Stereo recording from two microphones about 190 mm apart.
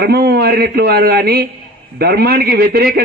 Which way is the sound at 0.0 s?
55° right (ahead or behind).